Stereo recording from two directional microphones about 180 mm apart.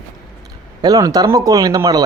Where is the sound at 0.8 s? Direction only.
20° right (ahead or behind).